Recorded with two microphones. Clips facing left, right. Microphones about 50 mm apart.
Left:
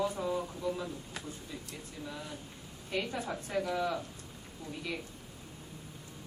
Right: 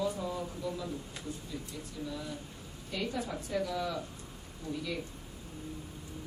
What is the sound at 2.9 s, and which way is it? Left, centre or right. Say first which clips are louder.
A woman's voice: left 1 dB; left.